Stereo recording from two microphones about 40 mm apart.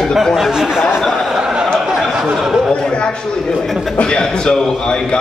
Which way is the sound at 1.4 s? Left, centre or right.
Right.